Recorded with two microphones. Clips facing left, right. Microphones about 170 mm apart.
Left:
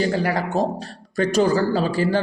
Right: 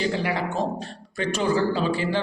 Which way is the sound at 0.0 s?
40° left (ahead or behind).